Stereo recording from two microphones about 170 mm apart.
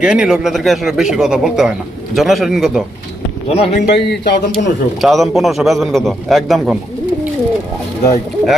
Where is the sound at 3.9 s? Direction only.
75° left (ahead or behind).